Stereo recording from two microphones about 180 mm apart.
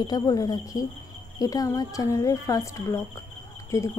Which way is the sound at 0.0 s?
20° left (ahead or behind).